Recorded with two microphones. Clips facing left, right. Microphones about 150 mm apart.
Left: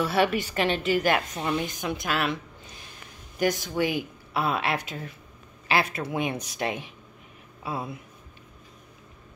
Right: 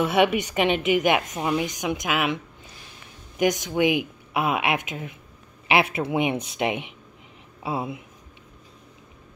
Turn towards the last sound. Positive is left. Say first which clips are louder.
# right 4 dB
turn(degrees=-25)  # may be behind; listen again after turning